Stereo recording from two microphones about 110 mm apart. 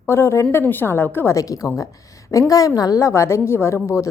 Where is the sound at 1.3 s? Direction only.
30° left (ahead or behind).